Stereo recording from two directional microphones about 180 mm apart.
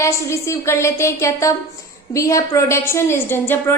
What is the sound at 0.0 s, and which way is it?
A woman's voice, 15° left (ahead or behind).